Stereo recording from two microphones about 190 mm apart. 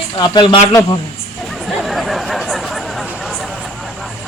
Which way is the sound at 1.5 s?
Centre (ahead or behind).